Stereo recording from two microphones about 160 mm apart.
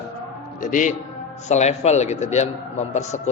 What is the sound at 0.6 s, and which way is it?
Speech, 50° left (ahead or behind).